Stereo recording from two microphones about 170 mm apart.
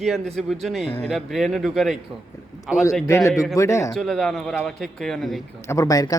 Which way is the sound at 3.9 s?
Centre (ahead or behind).